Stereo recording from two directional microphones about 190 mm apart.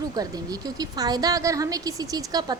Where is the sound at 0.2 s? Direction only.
20° right (ahead or behind).